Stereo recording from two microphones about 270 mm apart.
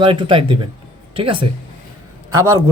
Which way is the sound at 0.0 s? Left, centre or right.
Centre.